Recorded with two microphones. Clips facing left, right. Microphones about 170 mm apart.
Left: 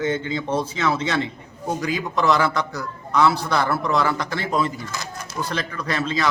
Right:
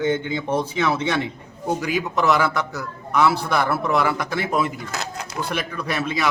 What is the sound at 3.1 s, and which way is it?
Speech, 15° right (ahead or behind).